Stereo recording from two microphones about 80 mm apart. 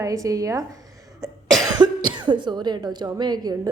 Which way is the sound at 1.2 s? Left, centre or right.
Right.